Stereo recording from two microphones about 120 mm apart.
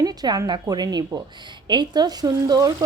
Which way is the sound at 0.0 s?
35° right (ahead or behind).